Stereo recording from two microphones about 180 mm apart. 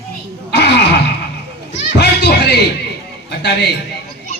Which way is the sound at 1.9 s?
65° left (ahead or behind).